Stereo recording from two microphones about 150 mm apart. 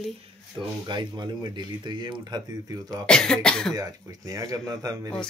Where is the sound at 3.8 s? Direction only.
25° right (ahead or behind).